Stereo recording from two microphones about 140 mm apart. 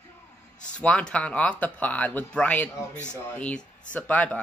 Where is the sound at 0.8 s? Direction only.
10° left (ahead or behind).